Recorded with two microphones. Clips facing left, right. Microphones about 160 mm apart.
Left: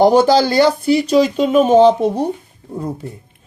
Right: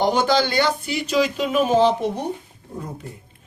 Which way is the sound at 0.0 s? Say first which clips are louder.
Left 8 dB; 35° left (ahead or behind).